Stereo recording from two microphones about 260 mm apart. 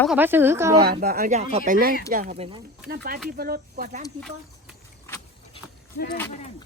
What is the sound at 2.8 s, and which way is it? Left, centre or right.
Speech, right.